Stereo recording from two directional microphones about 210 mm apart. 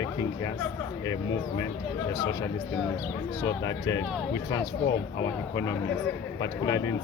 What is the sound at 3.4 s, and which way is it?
Speech, 15° left (ahead or behind).